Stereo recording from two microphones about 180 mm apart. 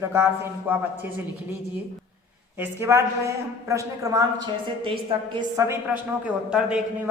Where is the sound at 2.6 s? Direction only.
15° right (ahead or behind).